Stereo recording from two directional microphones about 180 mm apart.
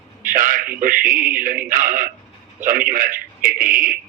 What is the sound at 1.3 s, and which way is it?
A man's voice, 50° right (ahead or behind).